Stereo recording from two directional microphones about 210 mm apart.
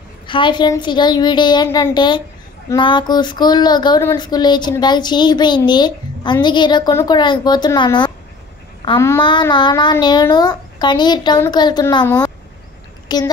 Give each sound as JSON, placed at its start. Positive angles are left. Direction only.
{"t": 0.3, "sound": "speech", "side_deg": 20}
{"t": 13.1, "sound": "a woman's voice", "side_deg": 20}